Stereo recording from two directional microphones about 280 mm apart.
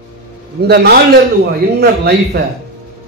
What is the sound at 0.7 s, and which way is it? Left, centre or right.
Speech, right.